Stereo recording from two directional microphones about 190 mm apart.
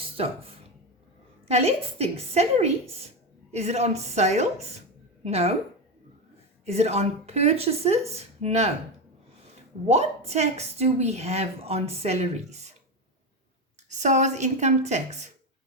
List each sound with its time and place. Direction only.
0.0 s a sound: 30° right (ahead or behind)
1.5 s a woman's voice: 35° right (ahead or behind)
6.7 s a woman's voice: 35° right (ahead or behind)
9.8 s a woman's voice: 35° right (ahead or behind)
13.9 s a woman's voice: 40° right (ahead or behind)